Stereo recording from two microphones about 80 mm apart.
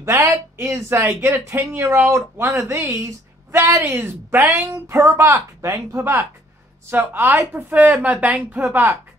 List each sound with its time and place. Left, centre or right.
0.0 s a woman's voice: right; by 8.6 s centre